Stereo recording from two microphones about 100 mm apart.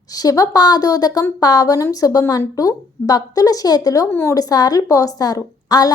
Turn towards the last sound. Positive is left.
turn(degrees=40)  # may be behind; listen again after turning